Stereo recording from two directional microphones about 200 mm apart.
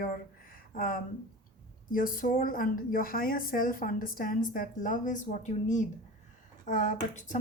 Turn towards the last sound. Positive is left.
turn(degrees=40)  # may be behind; listen again after turning